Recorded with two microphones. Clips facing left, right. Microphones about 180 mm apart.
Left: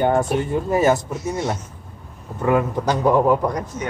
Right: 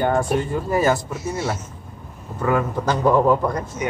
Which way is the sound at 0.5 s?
20° left (ahead or behind).